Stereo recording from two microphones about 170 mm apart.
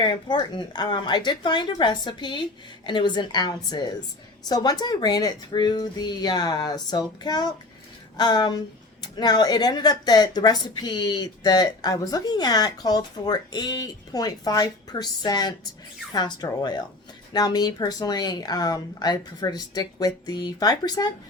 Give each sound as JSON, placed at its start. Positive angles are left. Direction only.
{"t": 0.0, "sound": "speech", "side_deg": 25}